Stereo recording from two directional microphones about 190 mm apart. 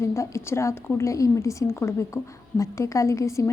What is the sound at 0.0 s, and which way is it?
A woman's voice, 15° left (ahead or behind).